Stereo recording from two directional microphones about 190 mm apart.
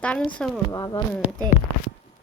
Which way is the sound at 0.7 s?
20° left (ahead or behind).